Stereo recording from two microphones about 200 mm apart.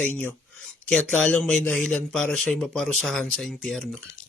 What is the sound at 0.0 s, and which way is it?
A man's voice, 5° left (ahead or behind).